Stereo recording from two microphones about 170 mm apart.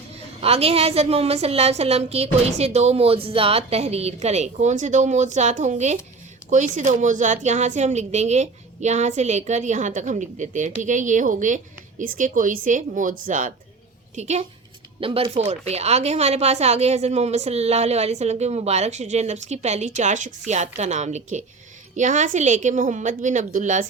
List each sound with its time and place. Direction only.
0.4 s a woman's voice: 35° right (ahead or behind)